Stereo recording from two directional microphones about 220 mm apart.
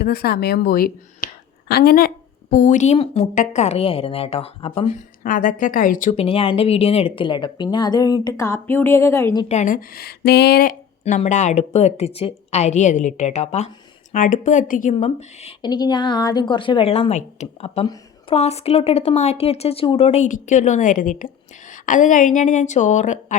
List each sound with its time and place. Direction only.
0.0 s speech: 45° left (ahead or behind); by 9.5 s 15° left (ahead or behind)
9.5 s a woman's voice: 35° left (ahead or behind)
11.0 s a woman's voice: 30° left (ahead or behind)